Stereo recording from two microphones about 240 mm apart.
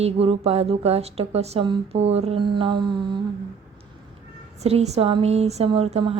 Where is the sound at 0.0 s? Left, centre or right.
Right.